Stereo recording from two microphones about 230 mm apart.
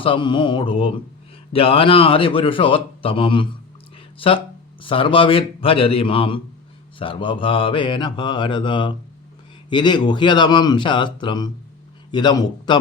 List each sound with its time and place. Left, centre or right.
0.0 s a man's voice: left